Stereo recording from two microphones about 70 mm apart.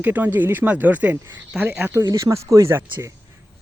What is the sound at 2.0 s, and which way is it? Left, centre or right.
Speech, right.